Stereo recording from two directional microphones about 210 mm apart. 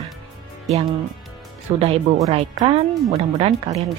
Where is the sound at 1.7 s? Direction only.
30° right (ahead or behind).